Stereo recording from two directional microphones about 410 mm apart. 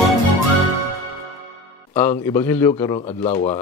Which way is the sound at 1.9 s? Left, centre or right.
Centre.